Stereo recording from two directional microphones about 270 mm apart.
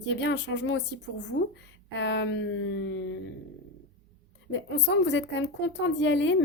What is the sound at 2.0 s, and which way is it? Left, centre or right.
Speech, left.